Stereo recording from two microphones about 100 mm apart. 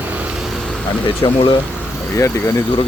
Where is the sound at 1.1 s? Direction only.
65° left (ahead or behind).